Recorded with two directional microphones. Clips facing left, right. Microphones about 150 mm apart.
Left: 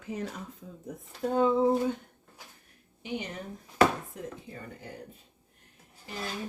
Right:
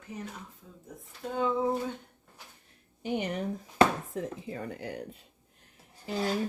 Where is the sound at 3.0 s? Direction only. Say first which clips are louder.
Right 4 dB; 50° right (ahead or behind).